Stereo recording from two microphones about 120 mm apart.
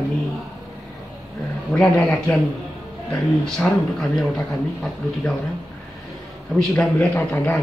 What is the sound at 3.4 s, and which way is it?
Speech, 5° left (ahead or behind).